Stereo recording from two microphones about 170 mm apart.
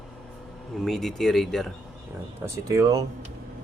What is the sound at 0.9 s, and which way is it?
Speech, centre (ahead or behind).